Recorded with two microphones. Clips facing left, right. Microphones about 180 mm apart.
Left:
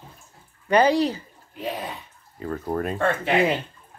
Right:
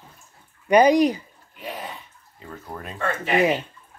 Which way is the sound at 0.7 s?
15° right (ahead or behind).